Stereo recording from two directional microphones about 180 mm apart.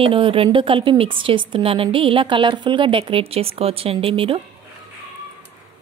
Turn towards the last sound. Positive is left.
turn(degrees=-30)  # may be behind; listen again after turning